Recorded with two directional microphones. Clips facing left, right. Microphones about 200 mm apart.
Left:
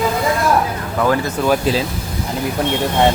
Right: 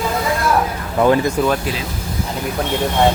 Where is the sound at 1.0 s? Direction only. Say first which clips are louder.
Right 3 dB; 20° right (ahead or behind).